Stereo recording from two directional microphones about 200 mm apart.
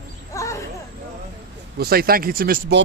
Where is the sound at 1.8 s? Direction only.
50° right (ahead or behind).